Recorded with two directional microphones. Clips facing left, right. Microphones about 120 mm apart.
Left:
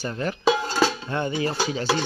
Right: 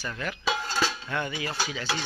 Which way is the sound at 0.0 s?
30° left (ahead or behind).